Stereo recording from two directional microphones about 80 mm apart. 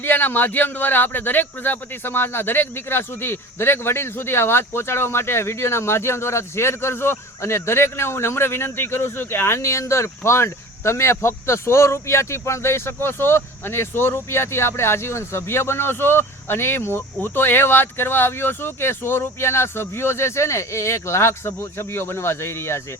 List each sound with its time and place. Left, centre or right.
0.0 s a man's voice: left